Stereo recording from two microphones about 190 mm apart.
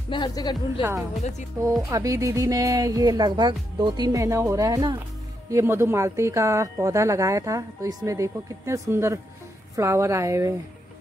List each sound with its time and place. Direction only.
0.1 s speech: 20° left (ahead or behind)
0.7 s speech: 15° right (ahead or behind)